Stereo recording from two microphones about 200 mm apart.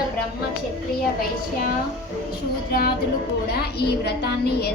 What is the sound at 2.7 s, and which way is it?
Speech, 50° left (ahead or behind).